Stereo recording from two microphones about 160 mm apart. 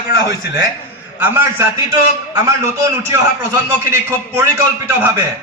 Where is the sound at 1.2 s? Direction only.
15° right (ahead or behind).